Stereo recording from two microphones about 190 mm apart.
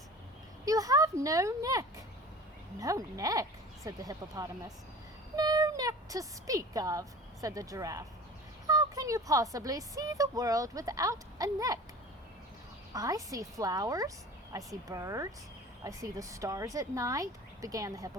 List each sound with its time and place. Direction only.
0.6 s speech: 20° right (ahead or behind)
2.8 s speech: 20° right (ahead or behind)
12.9 s speech: 20° right (ahead or behind)